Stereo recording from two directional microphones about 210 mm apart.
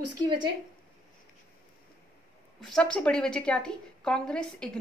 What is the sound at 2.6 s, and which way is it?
A woman's voice, 5° left (ahead or behind).